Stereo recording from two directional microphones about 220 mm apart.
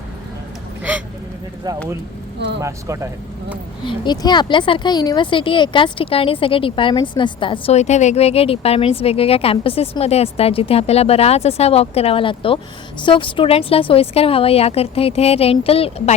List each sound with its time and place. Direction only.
2.6 s speech: 15° right (ahead or behind)
3.8 s speech: 20° left (ahead or behind)